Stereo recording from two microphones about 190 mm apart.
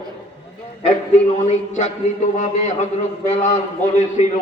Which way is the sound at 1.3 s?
35° left (ahead or behind).